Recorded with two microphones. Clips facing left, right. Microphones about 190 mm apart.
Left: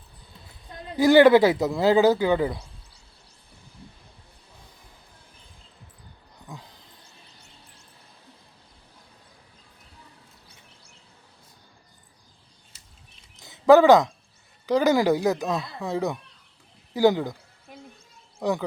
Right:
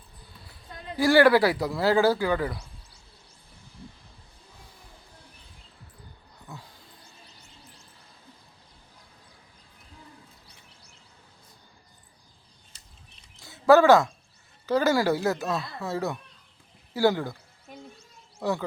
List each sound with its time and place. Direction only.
0.9 s speech: 20° left (ahead or behind)
13.4 s a sound: 15° left (ahead or behind)
14.7 s speech: 15° left (ahead or behind)
18.3 s speech: 15° left (ahead or behind)